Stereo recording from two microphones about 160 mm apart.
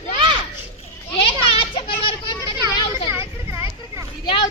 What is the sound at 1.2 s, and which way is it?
Children playing, 35° left (ahead or behind).